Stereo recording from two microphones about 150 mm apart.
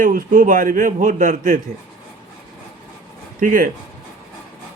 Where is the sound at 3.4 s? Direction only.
60° right (ahead or behind).